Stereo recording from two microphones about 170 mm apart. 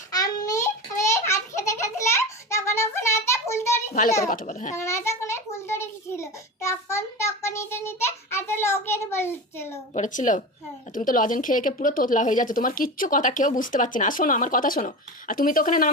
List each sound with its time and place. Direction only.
0.1 s a sound: 20° left (ahead or behind)
4.3 s a woman's voice: 50° left (ahead or behind)
4.8 s child singing: 15° left (ahead or behind)
9.9 s a woman's voice: 45° left (ahead or behind)